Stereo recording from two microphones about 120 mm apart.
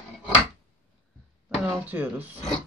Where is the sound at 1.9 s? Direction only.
15° right (ahead or behind).